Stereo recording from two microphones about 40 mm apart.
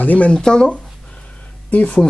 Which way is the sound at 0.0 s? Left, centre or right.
Left.